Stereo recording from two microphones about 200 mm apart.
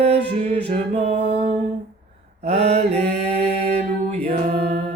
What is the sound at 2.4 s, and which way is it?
Mantra, 35° right (ahead or behind).